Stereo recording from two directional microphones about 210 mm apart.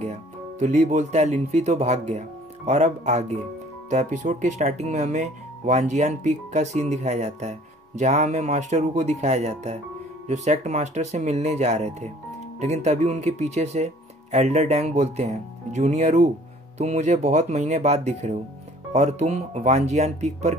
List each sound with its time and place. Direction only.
0.0 s speech: 35° right (ahead or behind)